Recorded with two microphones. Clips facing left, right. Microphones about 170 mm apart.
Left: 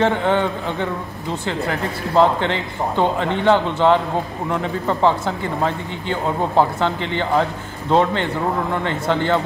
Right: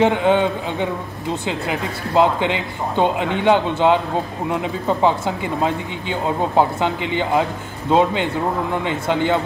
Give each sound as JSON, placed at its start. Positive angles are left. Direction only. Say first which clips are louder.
{"t": 0.0, "sound": "speech", "louder": "right 2 dB", "side_deg": -15}